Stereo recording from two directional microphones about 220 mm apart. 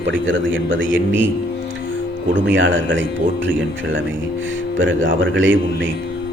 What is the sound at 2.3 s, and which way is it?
A man's voice, 55° right (ahead or behind).